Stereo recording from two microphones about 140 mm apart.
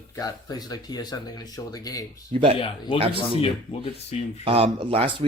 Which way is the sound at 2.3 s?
50° right (ahead or behind).